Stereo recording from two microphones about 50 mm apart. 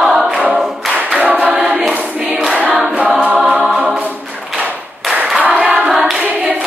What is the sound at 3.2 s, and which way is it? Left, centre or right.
Music, centre.